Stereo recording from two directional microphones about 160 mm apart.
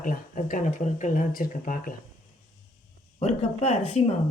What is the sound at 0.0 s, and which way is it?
Speech, 60° left (ahead or behind).